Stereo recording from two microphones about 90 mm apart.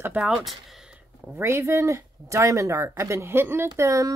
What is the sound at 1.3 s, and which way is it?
Speech, 30° right (ahead or behind).